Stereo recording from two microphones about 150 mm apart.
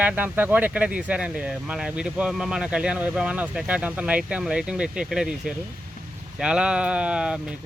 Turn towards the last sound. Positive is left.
turn(degrees=-5)  # may be behind; listen again after turning